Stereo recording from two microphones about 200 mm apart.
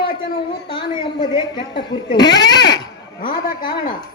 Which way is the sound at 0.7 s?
25° left (ahead or behind).